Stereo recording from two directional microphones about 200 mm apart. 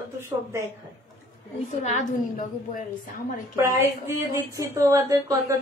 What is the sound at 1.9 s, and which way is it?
Speech, 40° left (ahead or behind).